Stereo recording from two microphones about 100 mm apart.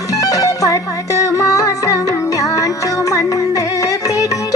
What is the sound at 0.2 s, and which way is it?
Music, 35° left (ahead or behind).